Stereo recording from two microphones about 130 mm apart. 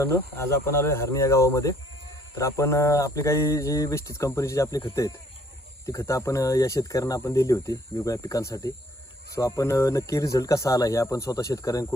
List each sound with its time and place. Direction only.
0.0 s speech: 20° left (ahead or behind)